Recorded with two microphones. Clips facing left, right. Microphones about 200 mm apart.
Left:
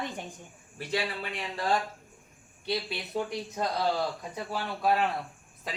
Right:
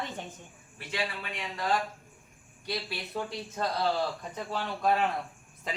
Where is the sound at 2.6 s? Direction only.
20° left (ahead or behind).